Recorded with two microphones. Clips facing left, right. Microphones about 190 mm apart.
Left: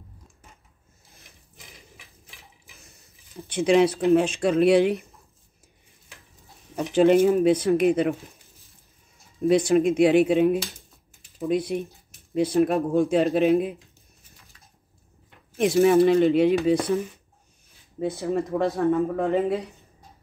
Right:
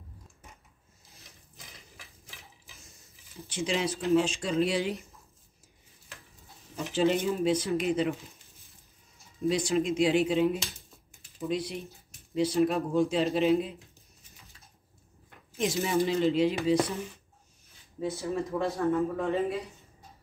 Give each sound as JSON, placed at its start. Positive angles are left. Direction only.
{"t": 3.4, "sound": "speech", "side_deg": 60}
{"t": 6.7, "sound": "speech", "side_deg": 60}
{"t": 9.5, "sound": "speech", "side_deg": 55}
{"t": 15.5, "sound": "speech", "side_deg": 60}
{"t": 18.0, "sound": "speech", "side_deg": 55}